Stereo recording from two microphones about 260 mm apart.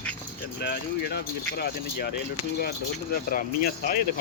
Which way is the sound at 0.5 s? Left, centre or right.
Left.